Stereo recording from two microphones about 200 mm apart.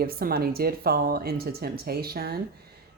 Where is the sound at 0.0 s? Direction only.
50° right (ahead or behind).